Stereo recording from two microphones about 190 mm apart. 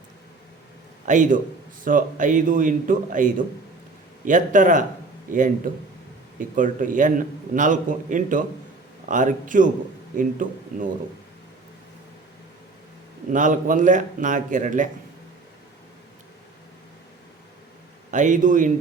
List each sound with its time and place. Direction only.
1.0 s a man's voice: 40° right (ahead or behind)
13.3 s a man's voice: 45° right (ahead or behind)
18.1 s a man's voice: 40° right (ahead or behind)